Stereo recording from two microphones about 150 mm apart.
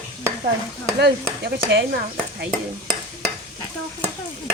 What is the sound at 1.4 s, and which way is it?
Speech, 90° right.